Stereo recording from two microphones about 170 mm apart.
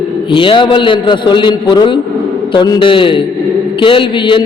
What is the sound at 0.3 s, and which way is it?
A man's voice, 30° left (ahead or behind).